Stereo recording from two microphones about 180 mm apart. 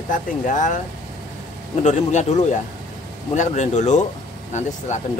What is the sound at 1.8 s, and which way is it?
Speech, 40° left (ahead or behind).